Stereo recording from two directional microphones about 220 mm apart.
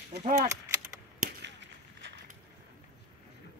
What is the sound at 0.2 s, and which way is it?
Speech, 35° right (ahead or behind).